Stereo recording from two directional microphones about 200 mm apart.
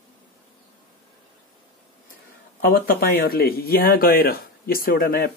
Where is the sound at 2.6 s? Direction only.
50° left (ahead or behind).